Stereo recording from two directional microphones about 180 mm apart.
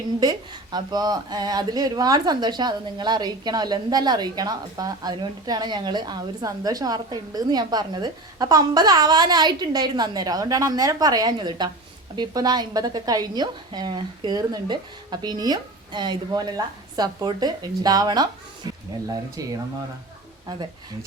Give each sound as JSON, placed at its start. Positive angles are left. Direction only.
{"t": 0.2, "sound": "speech", "side_deg": -25}
{"t": 19.4, "sound": "speech", "side_deg": -20}